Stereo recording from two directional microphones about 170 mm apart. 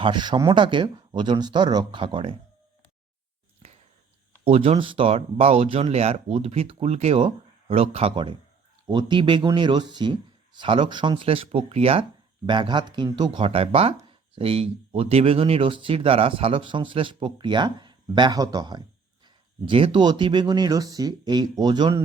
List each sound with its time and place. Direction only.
0.0 s speech: 25° right (ahead or behind)
3.6 s a sound: 35° right (ahead or behind)
4.4 s speech: 35° right (ahead or behind)